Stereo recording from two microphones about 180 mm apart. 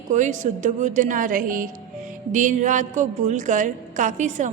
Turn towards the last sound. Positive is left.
turn(degrees=-45)  # may be behind; listen again after turning